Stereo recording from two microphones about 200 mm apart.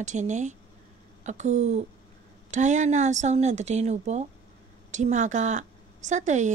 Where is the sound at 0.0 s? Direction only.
35° right (ahead or behind).